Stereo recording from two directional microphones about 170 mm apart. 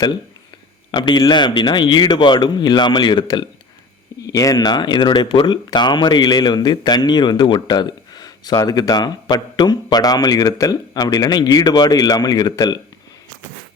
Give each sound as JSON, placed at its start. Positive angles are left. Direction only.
{"t": 0.9, "sound": "speech", "side_deg": 25}